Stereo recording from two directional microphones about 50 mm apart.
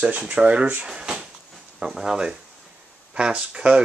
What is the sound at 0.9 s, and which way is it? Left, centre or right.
Speech, centre.